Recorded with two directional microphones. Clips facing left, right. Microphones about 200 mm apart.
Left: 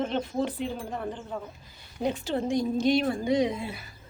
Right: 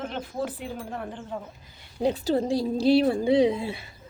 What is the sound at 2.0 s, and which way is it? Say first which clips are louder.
A woman's voice: right 4 dB; 35° right (ahead or behind).